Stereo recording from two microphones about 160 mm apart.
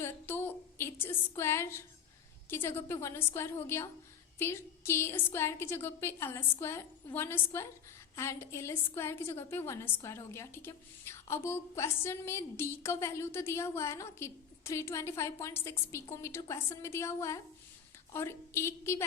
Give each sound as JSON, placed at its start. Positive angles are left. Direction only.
{"t": 0.0, "sound": "a woman's voice", "side_deg": 15}